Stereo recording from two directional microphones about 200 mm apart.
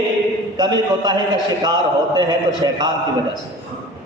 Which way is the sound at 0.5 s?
20° right (ahead or behind).